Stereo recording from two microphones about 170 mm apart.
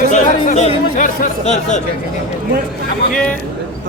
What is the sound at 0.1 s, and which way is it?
Speech, 45° left (ahead or behind).